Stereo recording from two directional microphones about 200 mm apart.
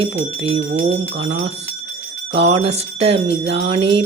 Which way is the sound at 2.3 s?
60° right (ahead or behind).